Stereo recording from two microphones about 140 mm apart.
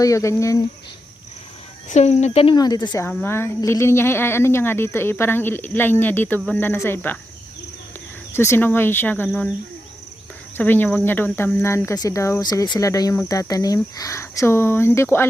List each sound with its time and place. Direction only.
0.0 s speech: 25° left (ahead or behind)
1.9 s speech: 55° left (ahead or behind)
2.6 s speech: 30° left (ahead or behind)
3.2 s speech: 15° left (ahead or behind)
8.3 s speech: 20° left (ahead or behind)
10.6 s speech: 10° left (ahead or behind)